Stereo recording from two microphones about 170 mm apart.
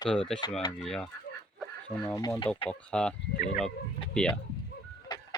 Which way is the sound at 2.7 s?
5° left (ahead or behind).